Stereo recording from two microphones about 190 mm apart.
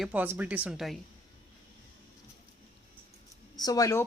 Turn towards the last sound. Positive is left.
turn(degrees=15)  # may be behind; listen again after turning